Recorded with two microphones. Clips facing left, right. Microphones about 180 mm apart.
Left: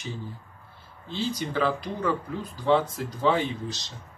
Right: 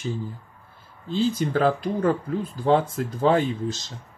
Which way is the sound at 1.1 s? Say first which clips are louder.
Right 6 dB; 50° right (ahead or behind).